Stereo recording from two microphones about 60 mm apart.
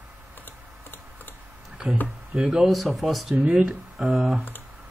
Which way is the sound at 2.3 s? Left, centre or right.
Centre.